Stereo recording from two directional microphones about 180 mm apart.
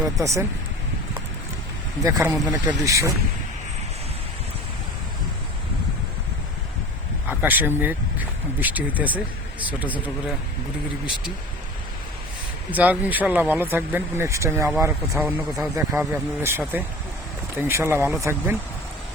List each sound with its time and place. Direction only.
0.2 s speech: 15° right (ahead or behind)
2.0 s speech: 20° right (ahead or behind)
7.3 s speech: 10° right (ahead or behind)
12.7 s speech: 10° right (ahead or behind)